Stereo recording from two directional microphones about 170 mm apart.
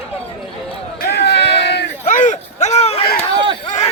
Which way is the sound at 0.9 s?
80° left.